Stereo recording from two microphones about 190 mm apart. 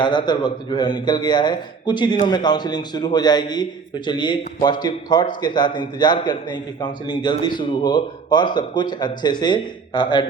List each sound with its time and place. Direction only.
0.0 s a man's voice: 25° left (ahead or behind)